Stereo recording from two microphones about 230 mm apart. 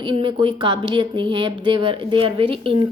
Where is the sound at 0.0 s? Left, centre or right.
Right.